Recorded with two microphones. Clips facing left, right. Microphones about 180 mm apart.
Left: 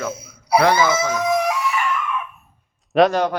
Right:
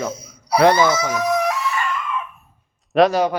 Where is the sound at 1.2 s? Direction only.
15° left (ahead or behind).